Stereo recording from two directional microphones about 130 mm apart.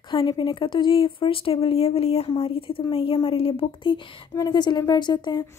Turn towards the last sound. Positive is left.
turn(degrees=35)  # may be behind; listen again after turning